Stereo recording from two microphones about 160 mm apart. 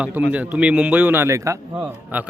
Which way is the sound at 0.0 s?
10° right (ahead or behind).